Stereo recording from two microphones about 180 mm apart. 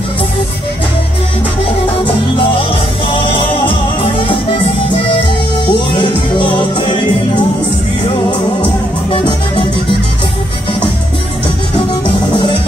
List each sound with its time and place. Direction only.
3.1 s music: 30° left (ahead or behind)
8.3 s music: 30° left (ahead or behind)
11.9 s music: 25° left (ahead or behind)